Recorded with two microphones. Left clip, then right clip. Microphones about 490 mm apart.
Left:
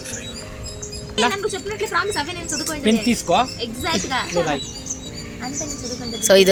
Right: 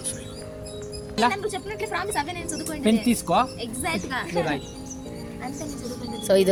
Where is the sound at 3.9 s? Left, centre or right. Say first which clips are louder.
Left 7 dB; right.